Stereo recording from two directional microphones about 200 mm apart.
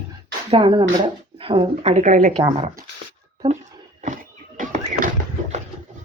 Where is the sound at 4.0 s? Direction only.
40° right (ahead or behind).